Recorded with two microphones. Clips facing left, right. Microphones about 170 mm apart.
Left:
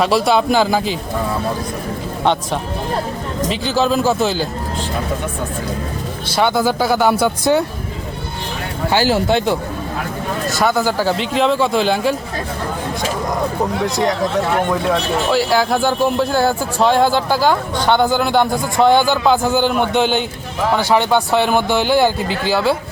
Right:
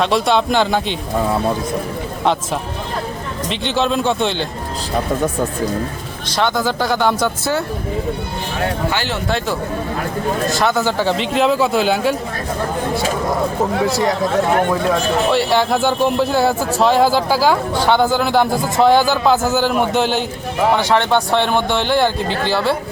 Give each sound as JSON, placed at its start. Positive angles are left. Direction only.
{"t": 0.0, "sound": "speech", "side_deg": 5}
{"t": 3.5, "sound": "speech", "side_deg": 0}
{"t": 6.2, "sound": "speech", "side_deg": 10}
{"t": 9.0, "sound": "speech", "side_deg": 30}
{"t": 10.6, "sound": "speech", "side_deg": 0}
{"t": 15.3, "sound": "speech", "side_deg": 0}